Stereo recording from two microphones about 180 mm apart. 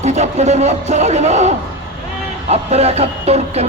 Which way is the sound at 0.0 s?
40° right (ahead or behind).